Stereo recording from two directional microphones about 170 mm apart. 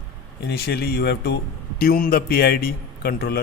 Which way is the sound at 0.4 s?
70° left (ahead or behind).